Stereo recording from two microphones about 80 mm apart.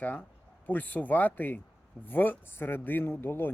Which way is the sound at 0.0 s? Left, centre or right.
Left.